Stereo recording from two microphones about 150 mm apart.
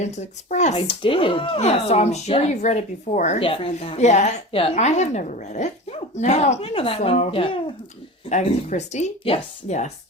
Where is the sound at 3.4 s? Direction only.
40° left (ahead or behind).